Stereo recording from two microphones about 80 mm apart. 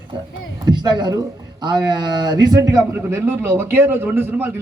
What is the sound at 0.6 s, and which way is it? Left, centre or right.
A man's voice, right.